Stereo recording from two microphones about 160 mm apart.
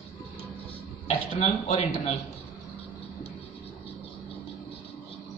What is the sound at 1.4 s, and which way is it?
Speech, 40° left (ahead or behind).